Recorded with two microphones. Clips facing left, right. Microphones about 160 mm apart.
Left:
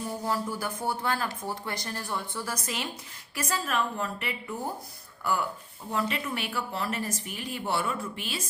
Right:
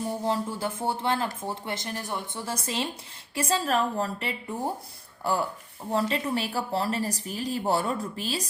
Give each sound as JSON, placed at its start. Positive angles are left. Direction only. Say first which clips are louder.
{"t": 0.1, "sound": "a woman's voice", "louder": "right 1 dB", "side_deg": -25}